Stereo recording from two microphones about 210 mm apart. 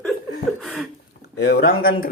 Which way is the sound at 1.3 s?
50° left (ahead or behind).